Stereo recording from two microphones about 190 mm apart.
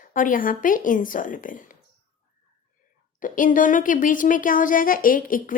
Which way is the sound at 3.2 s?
45° left (ahead or behind).